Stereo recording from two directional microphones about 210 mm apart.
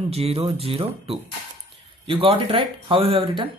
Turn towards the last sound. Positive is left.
turn(degrees=-25)  # may be behind; listen again after turning